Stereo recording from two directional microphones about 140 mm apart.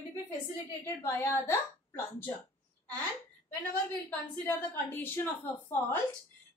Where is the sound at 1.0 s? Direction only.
15° left (ahead or behind).